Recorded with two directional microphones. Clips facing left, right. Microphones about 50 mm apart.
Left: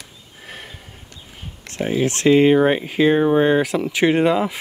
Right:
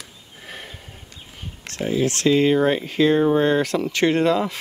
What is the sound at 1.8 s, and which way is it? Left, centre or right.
Speech, left.